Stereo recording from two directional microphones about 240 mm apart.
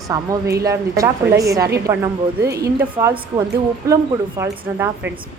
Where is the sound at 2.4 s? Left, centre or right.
Right.